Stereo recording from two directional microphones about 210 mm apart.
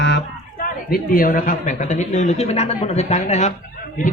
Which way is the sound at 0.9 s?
40° left (ahead or behind).